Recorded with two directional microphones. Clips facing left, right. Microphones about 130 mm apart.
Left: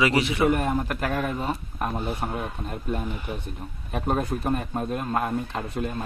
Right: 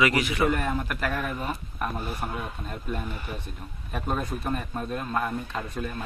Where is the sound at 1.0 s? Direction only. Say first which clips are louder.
Left 3 dB; 20° left (ahead or behind).